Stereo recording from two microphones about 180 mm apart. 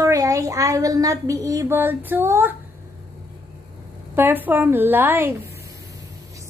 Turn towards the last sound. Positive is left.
turn(degrees=-10)  # may be behind; listen again after turning